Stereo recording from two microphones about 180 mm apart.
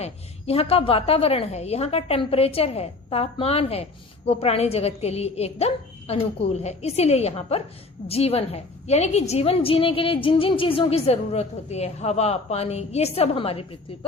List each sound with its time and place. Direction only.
0.0 s a woman's voice: 35° left (ahead or behind)